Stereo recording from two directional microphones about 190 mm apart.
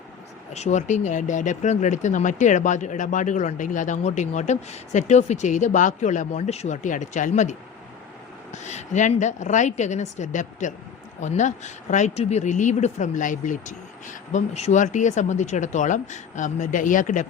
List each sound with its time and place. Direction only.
0.5 s speech: 35° left (ahead or behind)
8.5 s speech: 40° left (ahead or behind)